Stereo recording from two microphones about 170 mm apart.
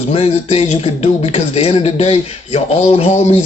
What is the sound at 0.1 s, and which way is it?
Speech, 35° left (ahead or behind).